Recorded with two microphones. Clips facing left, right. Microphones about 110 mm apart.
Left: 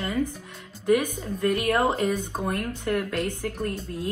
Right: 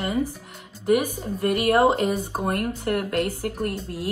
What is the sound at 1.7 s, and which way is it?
Speech, 30° right (ahead or behind).